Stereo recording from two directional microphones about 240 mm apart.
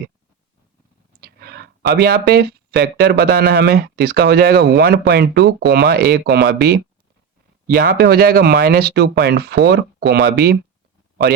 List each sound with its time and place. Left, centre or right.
1.2 s speech: right